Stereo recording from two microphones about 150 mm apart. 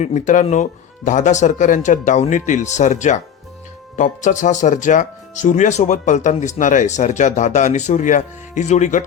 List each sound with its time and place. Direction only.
0.0 s speech: 50° left (ahead or behind)